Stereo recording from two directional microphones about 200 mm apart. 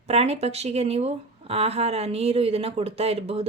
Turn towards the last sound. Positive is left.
turn(degrees=-30)  # may be behind; listen again after turning